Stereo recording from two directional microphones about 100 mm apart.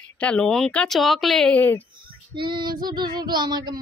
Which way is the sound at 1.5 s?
15° left (ahead or behind).